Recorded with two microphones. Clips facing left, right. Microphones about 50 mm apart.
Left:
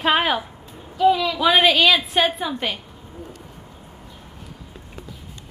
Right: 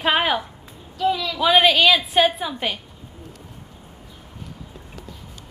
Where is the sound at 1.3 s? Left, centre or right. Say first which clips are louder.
Even; centre.